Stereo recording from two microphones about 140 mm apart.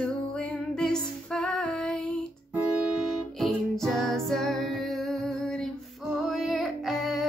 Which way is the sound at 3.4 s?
Centre (ahead or behind).